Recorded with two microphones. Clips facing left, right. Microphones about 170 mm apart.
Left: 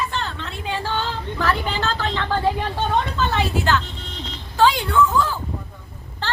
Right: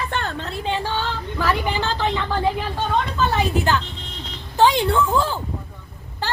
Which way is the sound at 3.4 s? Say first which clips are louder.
Right 1 dB; 15° right (ahead or behind).